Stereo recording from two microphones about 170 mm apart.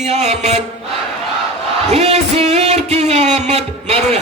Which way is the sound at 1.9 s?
40° right (ahead or behind).